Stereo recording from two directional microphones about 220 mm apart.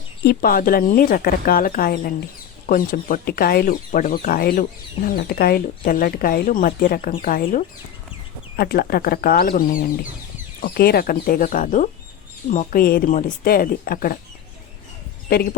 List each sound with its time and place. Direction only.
0.3 s speech: 40° left (ahead or behind)
15.3 s speech: 45° left (ahead or behind)